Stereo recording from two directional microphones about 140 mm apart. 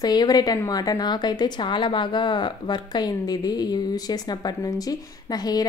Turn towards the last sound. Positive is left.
turn(degrees=30)  # may be behind; listen again after turning